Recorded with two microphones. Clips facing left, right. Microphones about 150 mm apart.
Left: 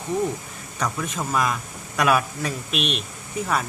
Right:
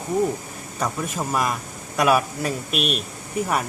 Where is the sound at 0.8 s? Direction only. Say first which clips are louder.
Right 1 dB; 15° right (ahead or behind).